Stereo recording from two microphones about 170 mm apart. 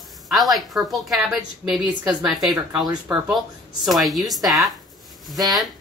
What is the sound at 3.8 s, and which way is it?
Speech, centre (ahead or behind).